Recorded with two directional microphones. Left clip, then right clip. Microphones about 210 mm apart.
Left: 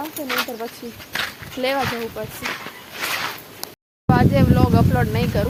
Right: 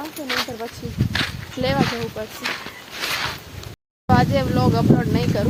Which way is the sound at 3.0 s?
Centre (ahead or behind).